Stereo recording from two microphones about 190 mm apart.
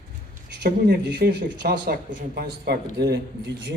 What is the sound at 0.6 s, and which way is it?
A man's voice, 55° right (ahead or behind).